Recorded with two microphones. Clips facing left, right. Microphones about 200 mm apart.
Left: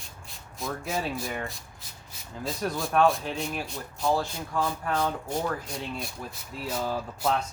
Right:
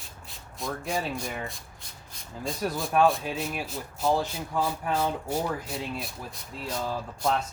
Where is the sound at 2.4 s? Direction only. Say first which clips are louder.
Even; centre (ahead or behind).